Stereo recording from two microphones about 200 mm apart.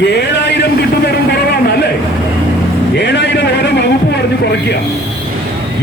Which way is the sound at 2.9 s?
60° left (ahead or behind).